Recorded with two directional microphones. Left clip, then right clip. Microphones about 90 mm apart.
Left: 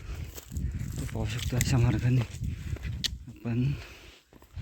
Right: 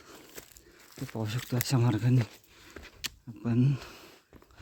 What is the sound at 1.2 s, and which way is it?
Speech, 55° right (ahead or behind).